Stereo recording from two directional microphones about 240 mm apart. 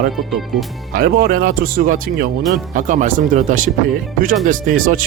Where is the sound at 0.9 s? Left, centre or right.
Right.